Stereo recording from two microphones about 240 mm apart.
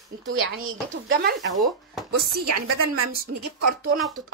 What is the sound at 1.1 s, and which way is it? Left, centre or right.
Speech, right.